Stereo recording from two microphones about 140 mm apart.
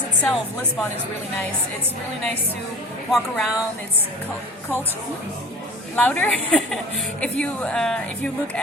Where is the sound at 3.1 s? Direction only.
Centre (ahead or behind).